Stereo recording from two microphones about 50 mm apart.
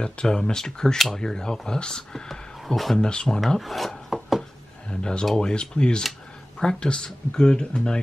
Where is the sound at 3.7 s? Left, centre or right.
Centre.